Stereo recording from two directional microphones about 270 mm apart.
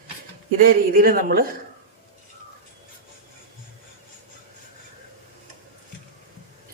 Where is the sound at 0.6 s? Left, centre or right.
Right.